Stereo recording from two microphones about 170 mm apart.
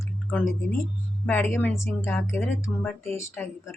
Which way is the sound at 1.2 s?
10° left (ahead or behind).